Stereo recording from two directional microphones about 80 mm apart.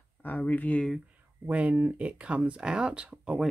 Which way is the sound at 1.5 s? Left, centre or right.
Centre.